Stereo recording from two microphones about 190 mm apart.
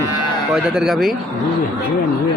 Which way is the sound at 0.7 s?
Centre (ahead or behind).